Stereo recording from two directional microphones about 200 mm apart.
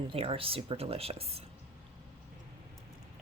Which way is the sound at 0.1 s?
25° right (ahead or behind).